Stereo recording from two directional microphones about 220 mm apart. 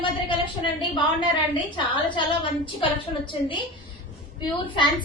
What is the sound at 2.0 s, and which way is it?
Speech, 20° left (ahead or behind).